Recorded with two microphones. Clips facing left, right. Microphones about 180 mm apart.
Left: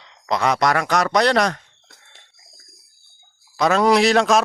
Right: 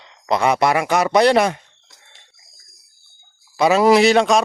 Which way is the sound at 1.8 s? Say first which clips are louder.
Left 1 dB; 55° left (ahead or behind).